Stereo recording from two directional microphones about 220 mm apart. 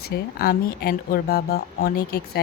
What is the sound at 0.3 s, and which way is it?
Speech, 45° left (ahead or behind).